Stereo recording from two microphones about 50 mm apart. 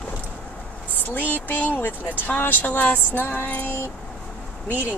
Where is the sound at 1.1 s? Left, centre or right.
Left.